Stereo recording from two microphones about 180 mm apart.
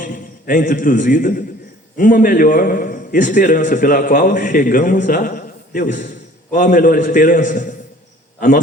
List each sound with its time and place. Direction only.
0.0 s a man's voice: 50° left (ahead or behind)